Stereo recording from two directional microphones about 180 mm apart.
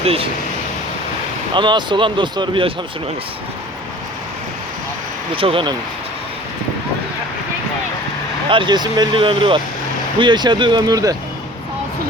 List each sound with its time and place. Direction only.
0.0 s speech: 30° right (ahead or behind)
1.5 s speech: 25° right (ahead or behind)
5.3 s speech: 30° right (ahead or behind)
8.4 s speech: 25° right (ahead or behind)